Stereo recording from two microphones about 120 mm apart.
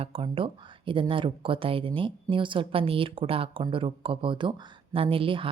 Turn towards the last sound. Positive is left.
turn(degrees=-50)  # may be behind; listen again after turning